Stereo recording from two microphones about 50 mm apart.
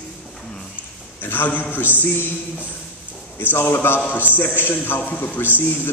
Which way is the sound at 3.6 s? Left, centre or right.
Left.